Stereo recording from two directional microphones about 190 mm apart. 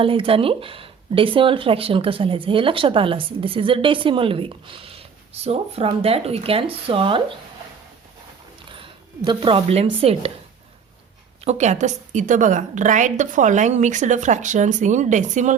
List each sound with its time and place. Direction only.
0.0 s speech: 30° right (ahead or behind)
8.7 s a sound: 25° right (ahead or behind)
10.0 s a woman's voice: 30° right (ahead or behind)
11.4 s a woman's voice: 35° right (ahead or behind)